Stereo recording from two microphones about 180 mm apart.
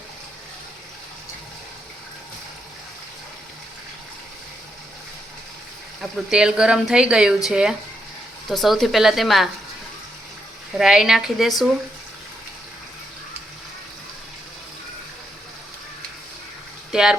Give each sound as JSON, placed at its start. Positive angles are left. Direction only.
{"t": 6.0, "sound": "speech", "side_deg": -5}
{"t": 10.8, "sound": "speech", "side_deg": -5}
{"t": 16.9, "sound": "speech", "side_deg": -5}